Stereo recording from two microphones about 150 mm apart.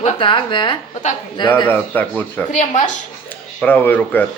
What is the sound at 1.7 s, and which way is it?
Speech, 10° left (ahead or behind).